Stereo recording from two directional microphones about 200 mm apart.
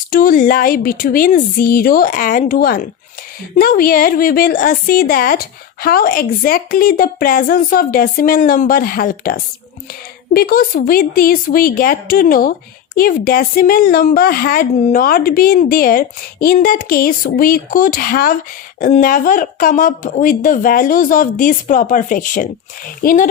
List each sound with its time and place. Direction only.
0.1 s a woman's voice: 45° left (ahead or behind)